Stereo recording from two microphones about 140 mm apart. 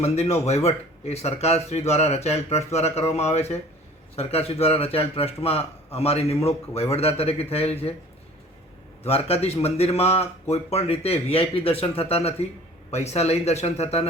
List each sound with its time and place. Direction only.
0.0 s a man's voice: 50° left (ahead or behind)
9.0 s a man's voice: 45° left (ahead or behind)